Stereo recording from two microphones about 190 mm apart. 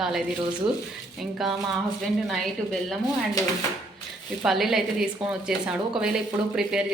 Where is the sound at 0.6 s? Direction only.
25° right (ahead or behind).